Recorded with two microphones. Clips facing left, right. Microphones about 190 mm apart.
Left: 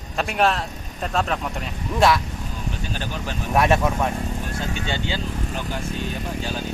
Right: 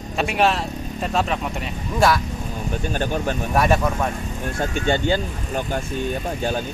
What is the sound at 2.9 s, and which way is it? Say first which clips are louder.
Speech: right 10 dB; 50° right (ahead or behind).